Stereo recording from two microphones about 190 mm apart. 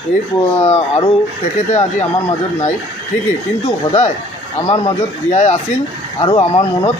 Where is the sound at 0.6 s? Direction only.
35° left (ahead or behind).